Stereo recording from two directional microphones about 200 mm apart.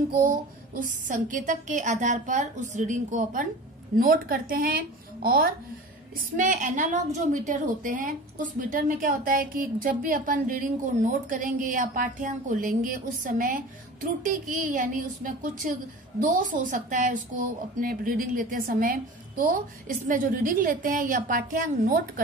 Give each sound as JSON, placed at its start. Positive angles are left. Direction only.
{"t": 0.1, "sound": "a woman's voice", "side_deg": -45}